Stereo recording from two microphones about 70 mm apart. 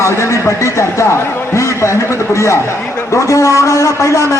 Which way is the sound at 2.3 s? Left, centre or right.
Left.